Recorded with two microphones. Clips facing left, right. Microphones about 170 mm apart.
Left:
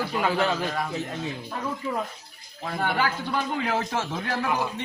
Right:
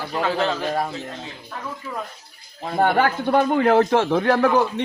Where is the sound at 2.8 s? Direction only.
55° right (ahead or behind).